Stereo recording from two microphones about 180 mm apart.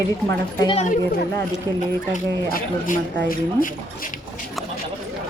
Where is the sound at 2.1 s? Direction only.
45° left (ahead or behind).